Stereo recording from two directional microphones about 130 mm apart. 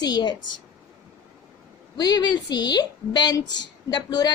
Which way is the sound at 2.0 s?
30° left (ahead or behind).